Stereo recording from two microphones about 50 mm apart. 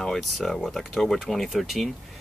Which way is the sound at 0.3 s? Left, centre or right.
Centre.